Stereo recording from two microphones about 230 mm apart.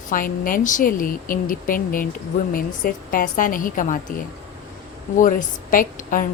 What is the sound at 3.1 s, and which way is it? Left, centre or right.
A woman's voice, left.